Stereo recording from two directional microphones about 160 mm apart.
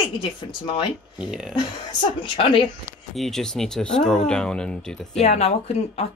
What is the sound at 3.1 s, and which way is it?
Speech, centre (ahead or behind).